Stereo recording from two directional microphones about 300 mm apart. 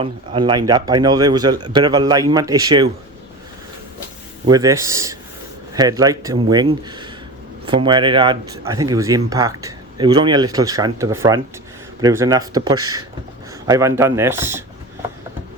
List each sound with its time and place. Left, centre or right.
0.0 s speech: centre
4.4 s speech: centre